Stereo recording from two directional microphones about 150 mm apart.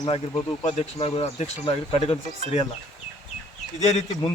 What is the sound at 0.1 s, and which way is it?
A man's voice, 45° left (ahead or behind).